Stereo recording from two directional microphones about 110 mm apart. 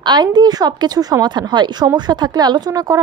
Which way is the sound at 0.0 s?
40° right (ahead or behind).